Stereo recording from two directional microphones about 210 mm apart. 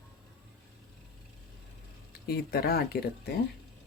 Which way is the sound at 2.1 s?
45° left (ahead or behind).